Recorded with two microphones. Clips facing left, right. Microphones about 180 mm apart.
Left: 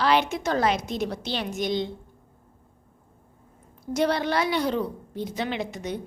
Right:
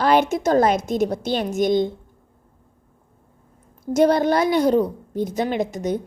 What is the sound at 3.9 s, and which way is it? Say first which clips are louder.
A woman's voice: right 7 dB; 45° right (ahead or behind).